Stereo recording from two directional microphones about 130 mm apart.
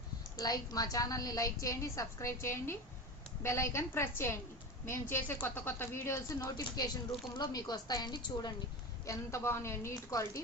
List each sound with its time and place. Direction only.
0.3 s a woman's voice: 30° left (ahead or behind)
9.0 s a woman's voice: 20° left (ahead or behind)